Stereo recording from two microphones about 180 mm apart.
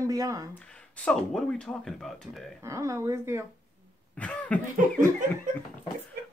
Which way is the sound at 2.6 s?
15° right (ahead or behind).